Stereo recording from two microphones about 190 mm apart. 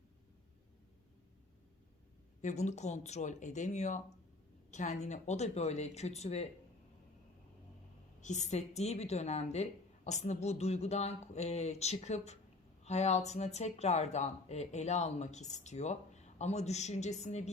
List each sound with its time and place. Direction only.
2.4 s speech: 40° left (ahead or behind)
8.2 s speech: 40° left (ahead or behind)